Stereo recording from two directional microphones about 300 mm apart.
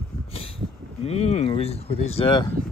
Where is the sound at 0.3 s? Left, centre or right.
Centre.